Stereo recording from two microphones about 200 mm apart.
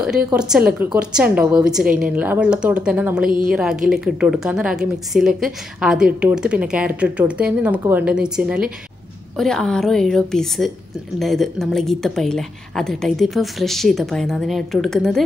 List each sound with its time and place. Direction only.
0.0 s a woman's voice: 5° right (ahead or behind)
3.3 s speech: 45° right (ahead or behind)
3.5 s a woman's voice: 5° right (ahead or behind)